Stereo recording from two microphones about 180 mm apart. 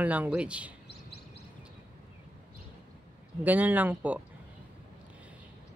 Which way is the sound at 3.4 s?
10° right (ahead or behind).